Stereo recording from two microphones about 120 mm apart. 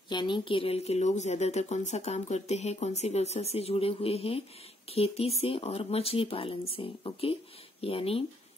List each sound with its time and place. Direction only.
0.1 s speech: 40° left (ahead or behind)